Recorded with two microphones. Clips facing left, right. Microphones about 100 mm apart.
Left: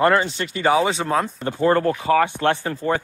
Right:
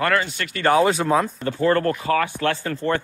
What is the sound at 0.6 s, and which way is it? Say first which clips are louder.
Speech: right 1 dB; 5° left (ahead or behind).